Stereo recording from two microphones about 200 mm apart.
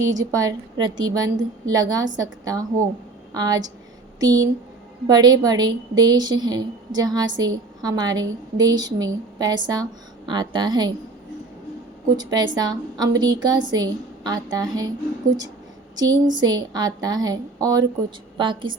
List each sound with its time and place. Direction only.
0.0 s a woman's voice: 15° right (ahead or behind)
12.1 s a woman's voice: 20° right (ahead or behind)
16.4 s a woman's voice: 20° right (ahead or behind)